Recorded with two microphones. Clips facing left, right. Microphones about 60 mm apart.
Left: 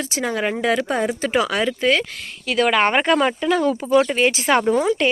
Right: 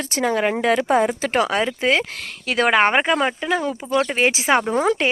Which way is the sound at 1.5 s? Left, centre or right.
Right.